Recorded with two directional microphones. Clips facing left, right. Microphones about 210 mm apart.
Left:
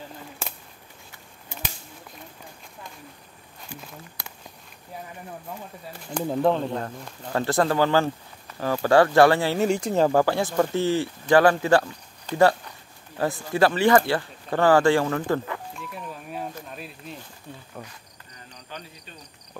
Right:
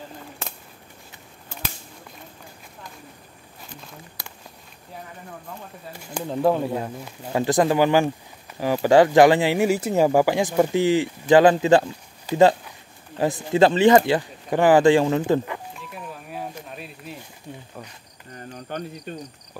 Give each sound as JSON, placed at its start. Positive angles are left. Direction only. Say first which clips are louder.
{"t": 6.2, "sound": "speech", "louder": "right 1 dB", "side_deg": -5}
{"t": 15.7, "sound": "a sound", "louder": "even", "side_deg": -5}
{"t": 17.5, "sound": "cricket", "louder": "right 4 dB", "side_deg": -10}
{"t": 18.3, "sound": "cricket", "louder": "right 9 dB", "side_deg": -55}